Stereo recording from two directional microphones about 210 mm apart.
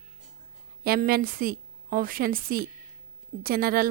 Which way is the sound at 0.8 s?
45° right (ahead or behind).